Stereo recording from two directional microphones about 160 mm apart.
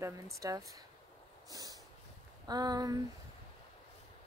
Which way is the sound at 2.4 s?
25° right (ahead or behind).